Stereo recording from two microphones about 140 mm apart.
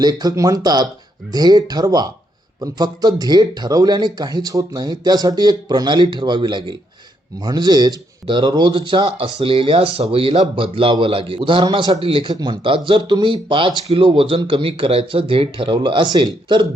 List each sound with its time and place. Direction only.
0.0 s speech: 30° right (ahead or behind)